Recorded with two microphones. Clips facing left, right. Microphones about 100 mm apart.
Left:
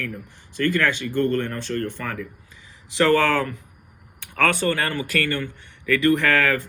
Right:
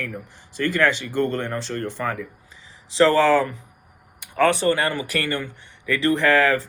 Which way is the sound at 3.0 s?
20° right (ahead or behind).